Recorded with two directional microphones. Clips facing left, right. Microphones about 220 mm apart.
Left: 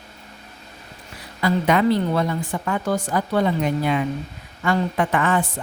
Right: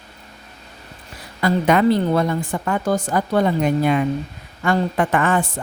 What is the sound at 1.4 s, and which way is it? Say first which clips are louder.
A woman's voice: right 2 dB; 45° right (ahead or behind).